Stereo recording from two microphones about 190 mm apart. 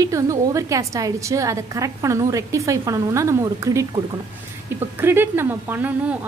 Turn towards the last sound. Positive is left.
turn(degrees=-10)  # may be behind; listen again after turning